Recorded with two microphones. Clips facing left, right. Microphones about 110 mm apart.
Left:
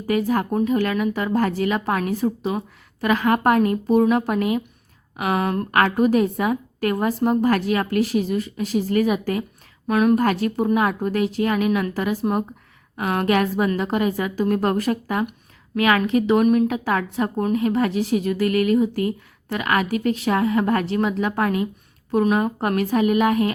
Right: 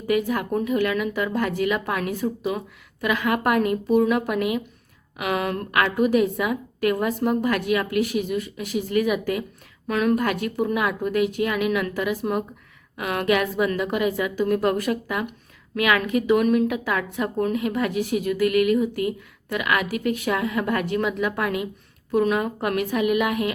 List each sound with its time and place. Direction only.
0.0 s a woman's voice: 35° left (ahead or behind)
9.8 s a woman's voice: 25° left (ahead or behind)